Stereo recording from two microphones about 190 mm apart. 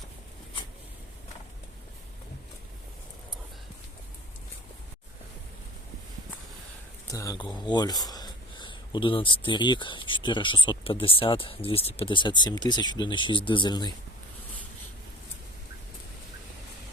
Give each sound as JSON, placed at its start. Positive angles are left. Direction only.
{"t": 7.1, "sound": "speech", "side_deg": 15}